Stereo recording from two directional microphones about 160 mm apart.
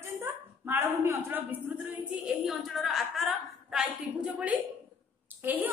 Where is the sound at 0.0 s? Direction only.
15° right (ahead or behind).